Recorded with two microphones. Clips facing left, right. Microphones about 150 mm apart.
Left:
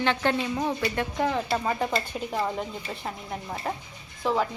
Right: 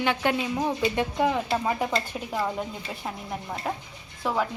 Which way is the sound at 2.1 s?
Centre (ahead or behind).